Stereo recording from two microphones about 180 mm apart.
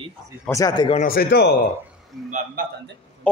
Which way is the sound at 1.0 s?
55° left (ahead or behind).